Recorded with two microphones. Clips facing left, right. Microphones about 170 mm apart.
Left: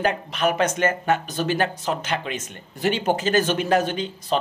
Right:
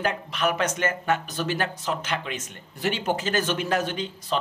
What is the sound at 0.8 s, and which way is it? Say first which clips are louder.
Speech: left 4 dB; 45° left (ahead or behind).